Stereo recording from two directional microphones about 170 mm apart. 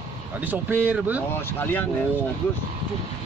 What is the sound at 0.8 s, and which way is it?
Speech, 10° right (ahead or behind).